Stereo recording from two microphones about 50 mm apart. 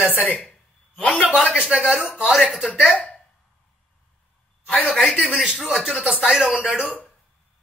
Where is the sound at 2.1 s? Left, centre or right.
Left.